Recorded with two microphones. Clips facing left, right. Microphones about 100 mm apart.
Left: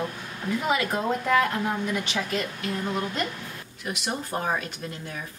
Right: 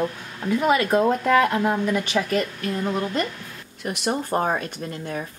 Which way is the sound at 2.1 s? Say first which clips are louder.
Right 6 dB; 45° right (ahead or behind).